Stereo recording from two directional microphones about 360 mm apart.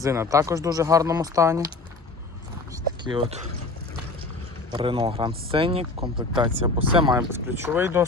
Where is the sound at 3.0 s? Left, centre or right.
Centre.